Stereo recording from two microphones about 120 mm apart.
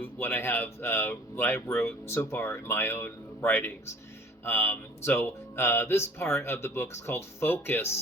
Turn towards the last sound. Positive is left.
turn(degrees=20)  # may be behind; listen again after turning